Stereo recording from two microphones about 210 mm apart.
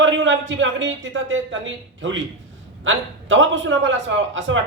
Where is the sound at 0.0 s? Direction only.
60° right (ahead or behind).